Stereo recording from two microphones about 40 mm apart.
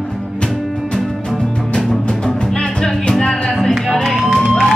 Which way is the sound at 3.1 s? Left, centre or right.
Left.